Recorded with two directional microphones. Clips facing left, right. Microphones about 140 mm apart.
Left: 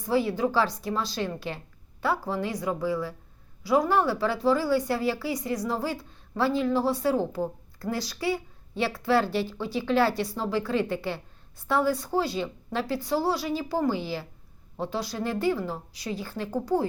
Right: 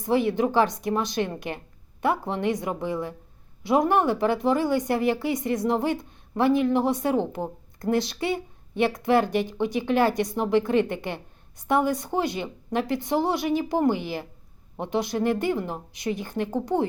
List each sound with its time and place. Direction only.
0.0 s a woman's voice: 20° right (ahead or behind)